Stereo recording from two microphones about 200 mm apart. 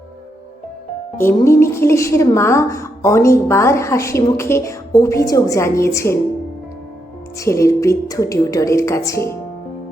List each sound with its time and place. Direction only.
1.5 s a woman's voice: 15° left (ahead or behind)
7.3 s a woman's voice: 15° left (ahead or behind)